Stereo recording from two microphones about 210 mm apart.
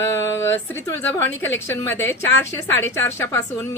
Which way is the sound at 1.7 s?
10° left (ahead or behind).